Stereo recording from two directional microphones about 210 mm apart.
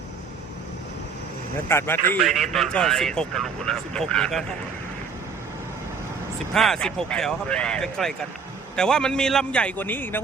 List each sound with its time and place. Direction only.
1.6 s speech: 10° left (ahead or behind)
6.5 s speech: centre (ahead or behind)